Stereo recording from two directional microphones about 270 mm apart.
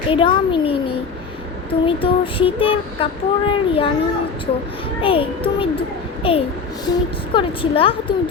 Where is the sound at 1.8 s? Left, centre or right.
Centre.